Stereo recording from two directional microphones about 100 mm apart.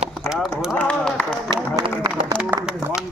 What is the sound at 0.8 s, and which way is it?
Speech, 10° left (ahead or behind).